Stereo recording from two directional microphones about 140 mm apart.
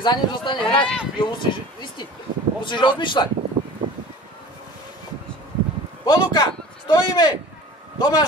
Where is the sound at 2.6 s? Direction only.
35° left (ahead or behind).